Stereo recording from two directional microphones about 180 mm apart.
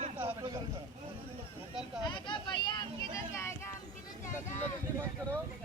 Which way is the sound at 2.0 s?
25° left (ahead or behind).